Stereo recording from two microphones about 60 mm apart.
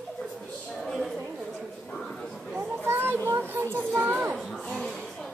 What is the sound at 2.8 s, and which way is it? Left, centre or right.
Children playing, right.